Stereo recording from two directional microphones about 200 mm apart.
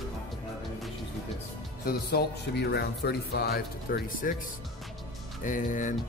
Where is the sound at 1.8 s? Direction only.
50° left (ahead or behind).